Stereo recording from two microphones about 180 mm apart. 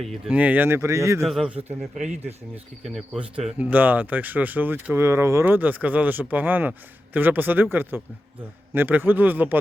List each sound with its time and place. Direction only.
0.0 s speech: centre (ahead or behind)
1.2 s a man's voice: centre (ahead or behind)
2.0 s speech: 40° right (ahead or behind)
2.8 s speech: centre (ahead or behind)